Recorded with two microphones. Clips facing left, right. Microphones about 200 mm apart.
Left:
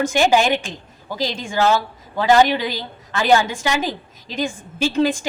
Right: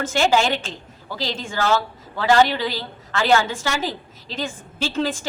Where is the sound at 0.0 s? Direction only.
15° left (ahead or behind).